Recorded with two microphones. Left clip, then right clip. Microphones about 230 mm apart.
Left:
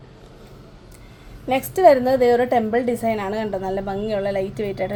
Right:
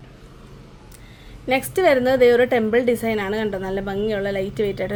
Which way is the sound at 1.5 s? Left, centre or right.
Right.